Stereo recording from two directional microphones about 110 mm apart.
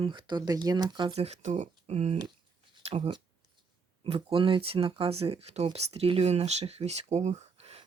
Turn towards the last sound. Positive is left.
turn(degrees=-70)  # may be behind; listen again after turning